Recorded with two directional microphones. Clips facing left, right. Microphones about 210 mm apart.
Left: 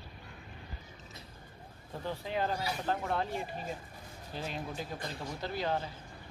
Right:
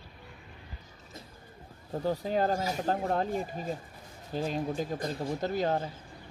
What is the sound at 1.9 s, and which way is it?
Speech, 40° right (ahead or behind).